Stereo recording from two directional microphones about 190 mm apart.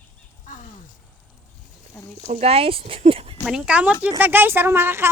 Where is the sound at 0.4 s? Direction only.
45° left (ahead or behind).